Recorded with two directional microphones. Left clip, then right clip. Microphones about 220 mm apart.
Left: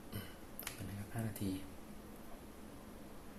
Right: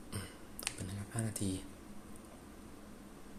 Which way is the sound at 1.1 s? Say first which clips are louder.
Right 3 dB; 20° right (ahead or behind).